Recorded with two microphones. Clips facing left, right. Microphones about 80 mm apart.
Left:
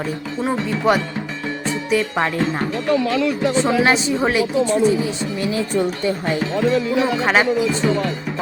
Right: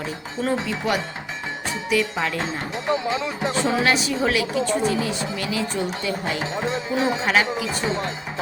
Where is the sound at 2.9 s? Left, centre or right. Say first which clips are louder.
Left 5 dB; right.